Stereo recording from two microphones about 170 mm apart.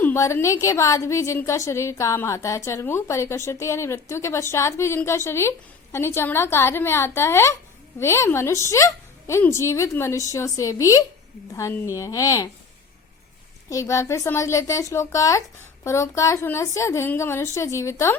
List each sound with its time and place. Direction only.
0.0 s a woman's voice: 15° left (ahead or behind)
13.7 s a woman's voice: 20° left (ahead or behind)